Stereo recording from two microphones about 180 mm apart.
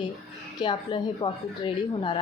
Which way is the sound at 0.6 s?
25° left (ahead or behind).